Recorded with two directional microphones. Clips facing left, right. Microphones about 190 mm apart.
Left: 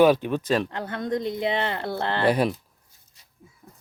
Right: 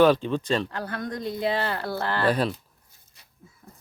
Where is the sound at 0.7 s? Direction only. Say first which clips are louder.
Left 4 dB; 20° left (ahead or behind).